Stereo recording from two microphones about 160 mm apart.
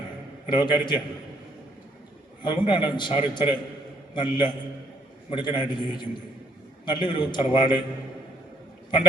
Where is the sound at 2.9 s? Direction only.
30° left (ahead or behind).